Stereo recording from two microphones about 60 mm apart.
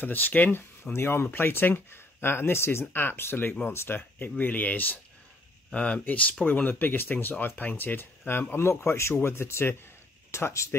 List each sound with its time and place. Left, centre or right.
0.0 s speech: left
5.7 s speech: centre; by 10.8 s left